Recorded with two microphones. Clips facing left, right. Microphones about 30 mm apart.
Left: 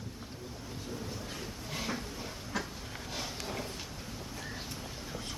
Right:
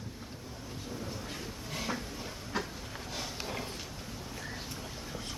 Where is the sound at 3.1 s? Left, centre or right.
Centre.